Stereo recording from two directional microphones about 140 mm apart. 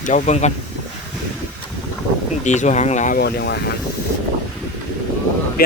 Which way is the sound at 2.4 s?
55° left (ahead or behind).